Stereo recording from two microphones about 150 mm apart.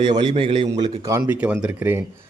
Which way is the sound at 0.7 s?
20° right (ahead or behind).